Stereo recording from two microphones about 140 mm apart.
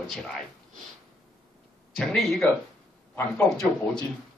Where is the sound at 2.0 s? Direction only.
5° left (ahead or behind).